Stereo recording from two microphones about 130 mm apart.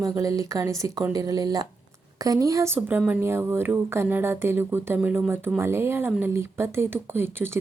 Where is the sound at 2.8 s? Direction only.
10° right (ahead or behind).